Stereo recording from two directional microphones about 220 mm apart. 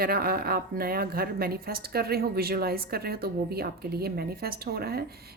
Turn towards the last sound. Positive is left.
turn(degrees=-45)  # may be behind; listen again after turning